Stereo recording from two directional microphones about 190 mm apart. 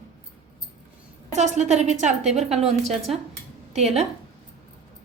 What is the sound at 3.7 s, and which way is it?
Speech, 35° right (ahead or behind).